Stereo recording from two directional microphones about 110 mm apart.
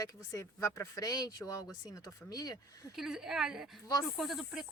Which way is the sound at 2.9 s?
5° right (ahead or behind).